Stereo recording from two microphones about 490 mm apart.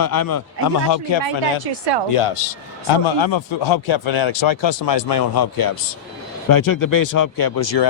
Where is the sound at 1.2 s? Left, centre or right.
Right.